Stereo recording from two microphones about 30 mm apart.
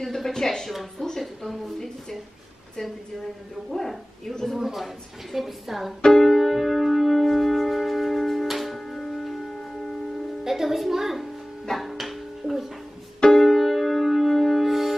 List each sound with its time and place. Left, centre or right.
0.0 s a woman's voice: centre
1.4 s a sound: centre
4.6 s a woman's voice: centre
6.0 s piano: centre
6.6 s music: centre
10.4 s music: centre
13.3 s music: centre
14.6 s music: centre